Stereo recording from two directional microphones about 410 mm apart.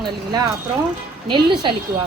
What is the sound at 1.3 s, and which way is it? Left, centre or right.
Speech, centre.